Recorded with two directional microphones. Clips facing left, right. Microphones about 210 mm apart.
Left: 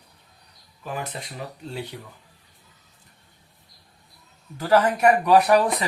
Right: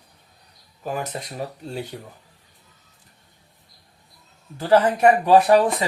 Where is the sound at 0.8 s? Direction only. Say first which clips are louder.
Right 4 dB; 40° right (ahead or behind).